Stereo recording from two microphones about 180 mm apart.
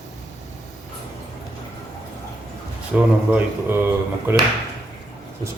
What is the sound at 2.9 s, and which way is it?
Speech, 10° right (ahead or behind).